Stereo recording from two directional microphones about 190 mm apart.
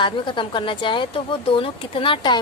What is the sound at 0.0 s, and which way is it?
A woman's voice, 25° left (ahead or behind).